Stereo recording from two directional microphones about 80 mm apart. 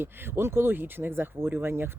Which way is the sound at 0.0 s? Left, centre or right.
Right.